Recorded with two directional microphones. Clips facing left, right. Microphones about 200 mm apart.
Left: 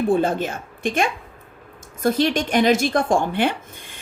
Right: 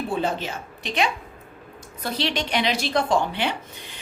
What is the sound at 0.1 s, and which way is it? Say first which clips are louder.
A woman's voice: left 6 dB; 50° left (ahead or behind).